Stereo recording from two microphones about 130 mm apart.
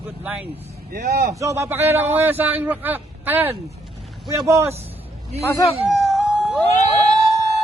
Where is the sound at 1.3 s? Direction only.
25° right (ahead or behind).